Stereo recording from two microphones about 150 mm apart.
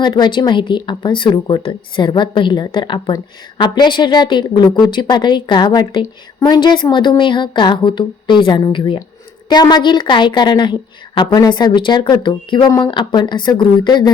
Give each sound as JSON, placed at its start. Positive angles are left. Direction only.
{"t": 0.0, "sound": "a woman's voice", "side_deg": 30}